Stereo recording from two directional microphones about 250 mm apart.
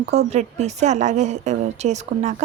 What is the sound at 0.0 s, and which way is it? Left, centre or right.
Speech, right.